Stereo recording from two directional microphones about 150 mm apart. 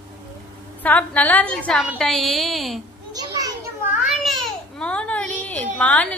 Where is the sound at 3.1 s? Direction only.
25° right (ahead or behind).